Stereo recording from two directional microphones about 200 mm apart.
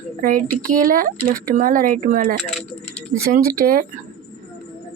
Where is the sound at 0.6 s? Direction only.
40° right (ahead or behind).